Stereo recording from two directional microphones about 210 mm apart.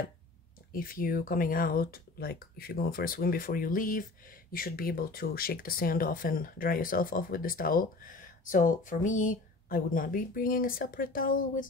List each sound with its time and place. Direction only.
0.7 s speech: 45° left (ahead or behind)